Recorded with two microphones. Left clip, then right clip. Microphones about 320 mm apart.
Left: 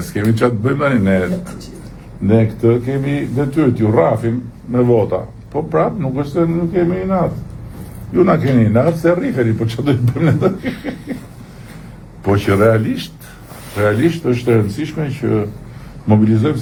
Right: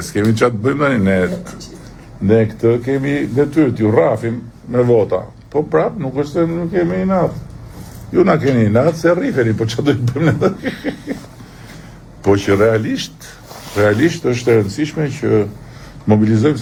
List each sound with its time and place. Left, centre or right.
0.1 s a man's voice: right
12.3 s a man's voice: right